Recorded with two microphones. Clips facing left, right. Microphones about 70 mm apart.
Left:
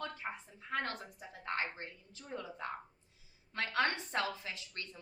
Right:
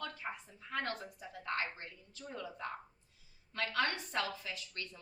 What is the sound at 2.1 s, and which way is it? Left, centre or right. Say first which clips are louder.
A woman's voice: even; left.